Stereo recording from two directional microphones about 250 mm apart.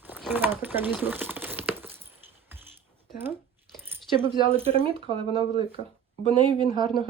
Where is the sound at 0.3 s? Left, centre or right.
Centre.